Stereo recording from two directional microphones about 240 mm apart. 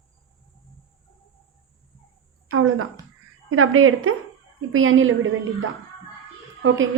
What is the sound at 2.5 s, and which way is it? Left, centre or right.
A woman's voice, right.